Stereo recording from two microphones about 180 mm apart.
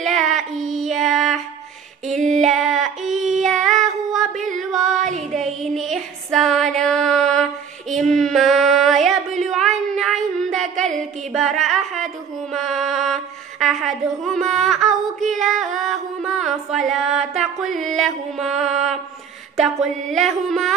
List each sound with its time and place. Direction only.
0.0 s female singing: centre (ahead or behind)
3.1 s child singing: centre (ahead or behind)
3.8 s a sound: centre (ahead or behind)
4.6 s music: centre (ahead or behind)
5.0 s child singing: 40° right (ahead or behind)
5.4 s a sound: centre (ahead or behind)
7.9 s female singing: centre (ahead or behind)
9.5 s child singing: centre (ahead or behind)
12.5 s a sound: centre (ahead or behind)
14.9 s child singing: 45° right (ahead or behind)
15.3 s music: centre (ahead or behind)
16.2 s mantra: centre (ahead or behind)
16.9 s music: 5° right (ahead or behind)
19.5 s music: centre (ahead or behind)